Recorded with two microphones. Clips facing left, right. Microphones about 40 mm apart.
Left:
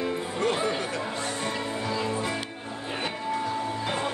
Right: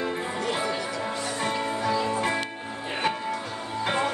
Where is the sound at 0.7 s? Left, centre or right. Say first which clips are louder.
Right 1 dB; left.